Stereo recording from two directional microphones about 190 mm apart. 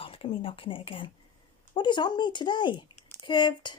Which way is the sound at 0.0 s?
30° left (ahead or behind).